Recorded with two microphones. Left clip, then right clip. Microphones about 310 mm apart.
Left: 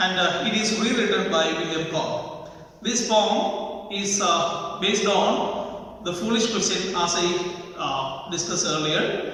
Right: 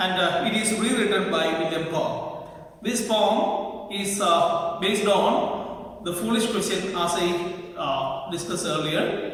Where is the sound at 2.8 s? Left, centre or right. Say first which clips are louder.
Left 2 dB; centre.